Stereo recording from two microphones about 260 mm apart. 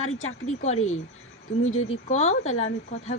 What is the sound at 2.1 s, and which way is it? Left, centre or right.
Speech, left.